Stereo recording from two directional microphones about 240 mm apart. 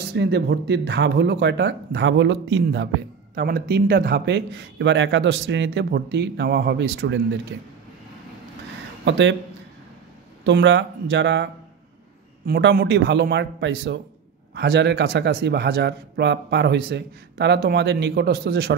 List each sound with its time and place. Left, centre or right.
0.1 s speech: right
9.0 s speech: right
10.4 s speech: right